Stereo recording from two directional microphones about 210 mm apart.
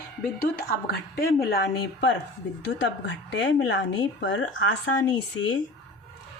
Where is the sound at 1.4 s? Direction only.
50° left (ahead or behind).